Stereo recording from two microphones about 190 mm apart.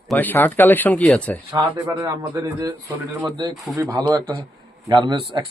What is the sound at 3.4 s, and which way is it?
Speech, 20° right (ahead or behind).